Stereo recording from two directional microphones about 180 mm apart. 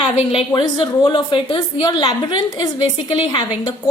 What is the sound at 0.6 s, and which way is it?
A woman's voice, 25° left (ahead or behind).